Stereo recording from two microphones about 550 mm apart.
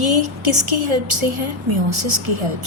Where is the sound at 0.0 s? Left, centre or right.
Right.